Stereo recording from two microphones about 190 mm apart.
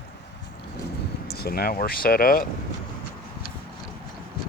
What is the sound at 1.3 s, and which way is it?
Speech, 55° left (ahead or behind).